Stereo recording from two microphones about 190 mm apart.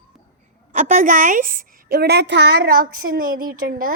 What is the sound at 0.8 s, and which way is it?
A woman's voice, 40° right (ahead or behind).